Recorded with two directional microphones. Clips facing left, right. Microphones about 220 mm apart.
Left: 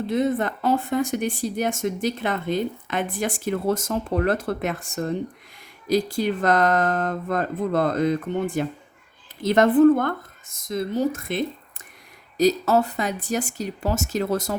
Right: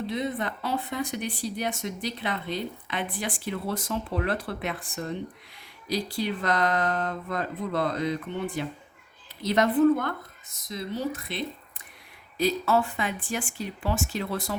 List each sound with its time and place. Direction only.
0.1 s speech: 45° left (ahead or behind)